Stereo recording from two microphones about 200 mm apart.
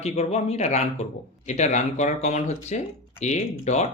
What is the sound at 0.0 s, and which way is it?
Speech, 30° left (ahead or behind).